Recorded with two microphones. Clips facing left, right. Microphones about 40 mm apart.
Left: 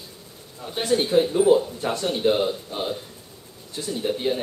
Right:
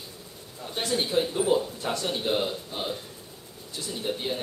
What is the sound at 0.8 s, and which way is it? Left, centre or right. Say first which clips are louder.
Speech: left 6 dB; centre.